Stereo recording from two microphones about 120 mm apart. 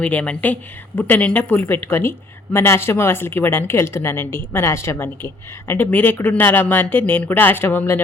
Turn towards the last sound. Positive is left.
turn(degrees=20)  # may be behind; listen again after turning